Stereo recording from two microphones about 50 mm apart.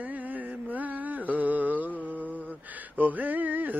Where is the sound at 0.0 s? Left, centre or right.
Right.